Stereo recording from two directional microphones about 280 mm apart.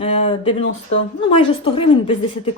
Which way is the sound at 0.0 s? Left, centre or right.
Centre.